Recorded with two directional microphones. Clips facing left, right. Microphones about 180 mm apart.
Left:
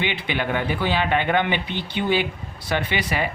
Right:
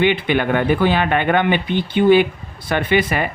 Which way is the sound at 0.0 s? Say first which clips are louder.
Right 9 dB; 55° right (ahead or behind).